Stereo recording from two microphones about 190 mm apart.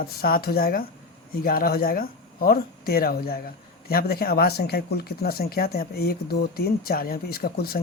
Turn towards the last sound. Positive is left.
turn(degrees=55)  # may be behind; listen again after turning